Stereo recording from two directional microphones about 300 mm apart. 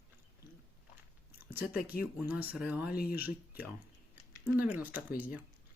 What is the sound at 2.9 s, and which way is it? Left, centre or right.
Speech, left.